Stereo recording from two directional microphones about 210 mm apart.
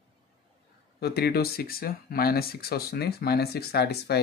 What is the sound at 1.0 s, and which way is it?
Speech, 50° left (ahead or behind).